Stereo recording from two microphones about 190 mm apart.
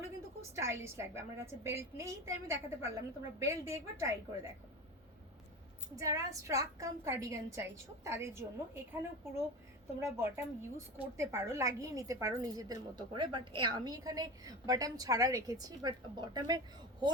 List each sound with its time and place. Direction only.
0.5 s a woman's voice: 15° right (ahead or behind)
6.0 s a woman's voice: 15° right (ahead or behind)